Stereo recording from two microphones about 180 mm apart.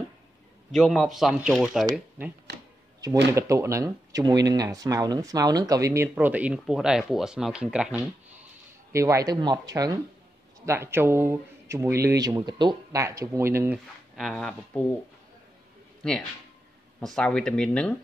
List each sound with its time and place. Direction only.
0.7 s speech: centre (ahead or behind)
3.3 s speech: 15° right (ahead or behind)
8.9 s speech: 15° right (ahead or behind)
14.1 s speech: 5° left (ahead or behind)
16.0 s speech: centre (ahead or behind)